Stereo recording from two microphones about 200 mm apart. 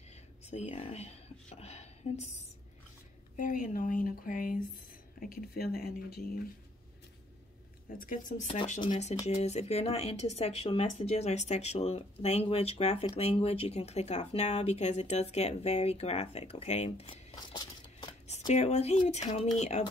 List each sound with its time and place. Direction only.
0.5 s speech: 35° left (ahead or behind)
3.3 s speech: 40° left (ahead or behind)
8.0 s speech: 40° left (ahead or behind)